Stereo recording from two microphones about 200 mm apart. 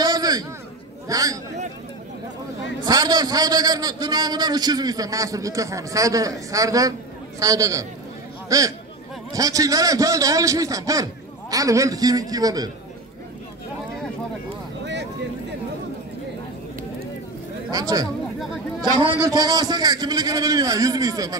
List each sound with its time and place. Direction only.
0.0 s a sound: 20° right (ahead or behind)
1.0 s speech: 15° right (ahead or behind)
2.8 s a man's voice: 20° right (ahead or behind)
17.6 s speech: 20° right (ahead or behind)
18.4 s a sound: centre (ahead or behind)
19.2 s a man's voice: 20° right (ahead or behind)